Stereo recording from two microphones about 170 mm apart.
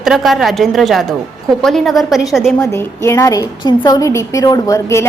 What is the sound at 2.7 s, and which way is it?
A woman's voice, 15° left (ahead or behind).